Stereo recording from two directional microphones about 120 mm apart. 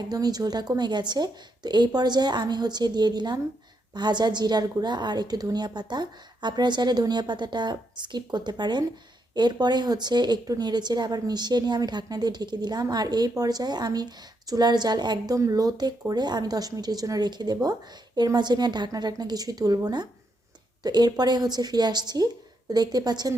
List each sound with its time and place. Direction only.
0.1 s a woman's voice: 35° right (ahead or behind)